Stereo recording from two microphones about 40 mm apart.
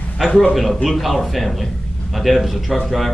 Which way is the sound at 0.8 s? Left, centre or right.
Centre.